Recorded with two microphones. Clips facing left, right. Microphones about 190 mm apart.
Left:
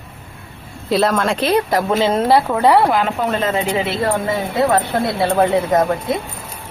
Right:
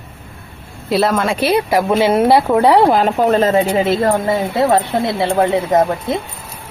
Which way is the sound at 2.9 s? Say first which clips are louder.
Right 5 dB; 40° right (ahead or behind).